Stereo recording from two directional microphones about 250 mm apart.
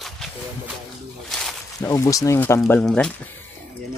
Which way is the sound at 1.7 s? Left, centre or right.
Centre.